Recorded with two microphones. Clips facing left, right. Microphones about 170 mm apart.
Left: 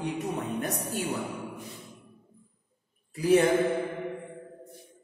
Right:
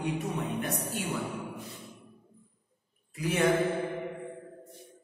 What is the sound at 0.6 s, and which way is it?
Speech, 40° left (ahead or behind).